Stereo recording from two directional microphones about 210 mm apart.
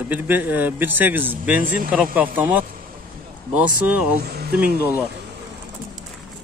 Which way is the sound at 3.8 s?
5° right (ahead or behind).